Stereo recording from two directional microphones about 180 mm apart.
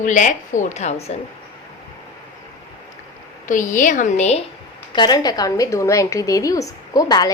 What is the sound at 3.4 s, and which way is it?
A woman's voice, 45° left (ahead or behind).